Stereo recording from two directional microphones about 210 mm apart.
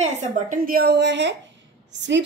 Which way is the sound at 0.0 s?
35° right (ahead or behind).